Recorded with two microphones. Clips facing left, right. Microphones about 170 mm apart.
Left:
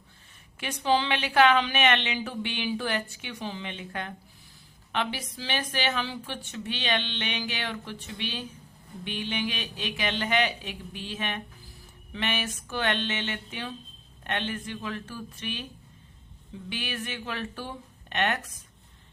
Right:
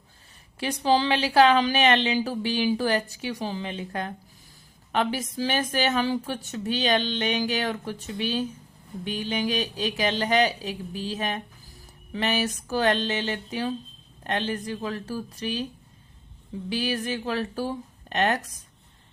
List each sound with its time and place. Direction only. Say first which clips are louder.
0.6 s a woman's voice: right 3 dB; 35° right (ahead or behind)
16.6 s a woman's voice: right 8 dB; 35° right (ahead or behind)